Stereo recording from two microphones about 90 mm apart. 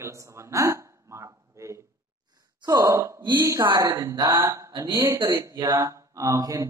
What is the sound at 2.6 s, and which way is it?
Speech, 40° right (ahead or behind).